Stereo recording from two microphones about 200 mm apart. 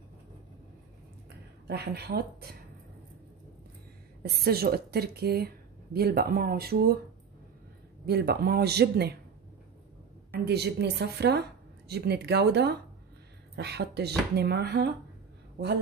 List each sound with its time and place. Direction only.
1.7 s speech: 55° right (ahead or behind)
4.2 s speech: 50° right (ahead or behind)
8.0 s speech: 55° right (ahead or behind)
10.4 s a woman's voice: 55° right (ahead or behind)